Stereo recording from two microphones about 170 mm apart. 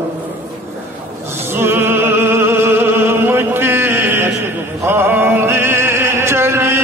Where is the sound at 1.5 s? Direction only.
15° right (ahead or behind).